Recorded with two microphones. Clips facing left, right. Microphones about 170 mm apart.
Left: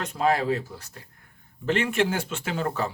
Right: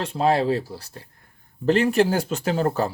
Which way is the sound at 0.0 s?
30° right (ahead or behind).